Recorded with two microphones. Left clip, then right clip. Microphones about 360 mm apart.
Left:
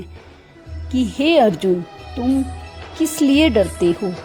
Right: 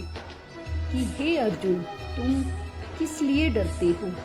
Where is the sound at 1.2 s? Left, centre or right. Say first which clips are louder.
Left 12 dB; left.